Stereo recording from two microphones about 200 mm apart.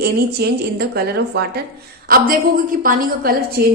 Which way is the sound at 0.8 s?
50° right (ahead or behind).